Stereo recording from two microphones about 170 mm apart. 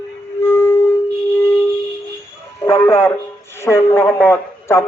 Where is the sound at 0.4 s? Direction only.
15° left (ahead or behind).